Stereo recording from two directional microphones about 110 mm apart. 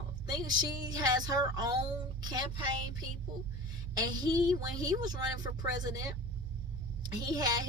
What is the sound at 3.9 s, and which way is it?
Speech, 40° right (ahead or behind).